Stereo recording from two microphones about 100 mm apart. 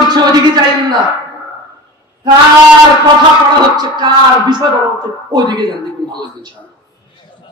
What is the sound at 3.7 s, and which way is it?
Mantra, 45° right (ahead or behind).